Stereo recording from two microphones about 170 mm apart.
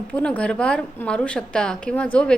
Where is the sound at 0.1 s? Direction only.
5° left (ahead or behind).